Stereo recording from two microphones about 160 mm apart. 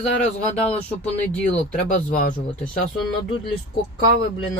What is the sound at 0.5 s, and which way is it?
Speech, 5° left (ahead or behind).